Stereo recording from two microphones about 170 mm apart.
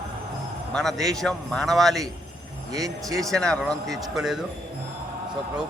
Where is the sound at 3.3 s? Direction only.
5° left (ahead or behind).